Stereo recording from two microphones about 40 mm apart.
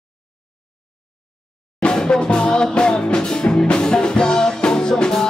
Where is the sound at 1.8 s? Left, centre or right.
Left.